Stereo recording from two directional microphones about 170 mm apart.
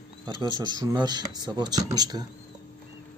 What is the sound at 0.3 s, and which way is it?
Speech, 25° right (ahead or behind).